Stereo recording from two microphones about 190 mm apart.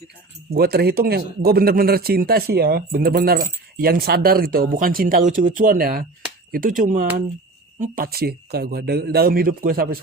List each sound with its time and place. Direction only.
0.5 s speech: 55° right (ahead or behind)